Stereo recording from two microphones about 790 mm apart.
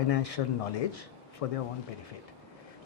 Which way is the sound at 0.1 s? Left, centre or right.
Left.